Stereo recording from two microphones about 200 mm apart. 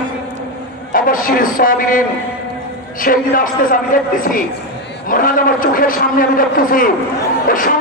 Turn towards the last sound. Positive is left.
turn(degrees=45)  # may be behind; listen again after turning